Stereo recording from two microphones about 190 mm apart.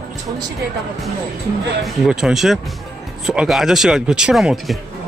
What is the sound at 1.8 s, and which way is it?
Speech, centre (ahead or behind).